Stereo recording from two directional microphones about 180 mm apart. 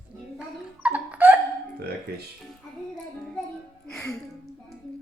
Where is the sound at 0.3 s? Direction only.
5° right (ahead or behind).